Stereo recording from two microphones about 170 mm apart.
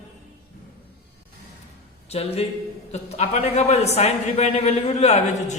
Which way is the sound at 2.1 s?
35° left (ahead or behind).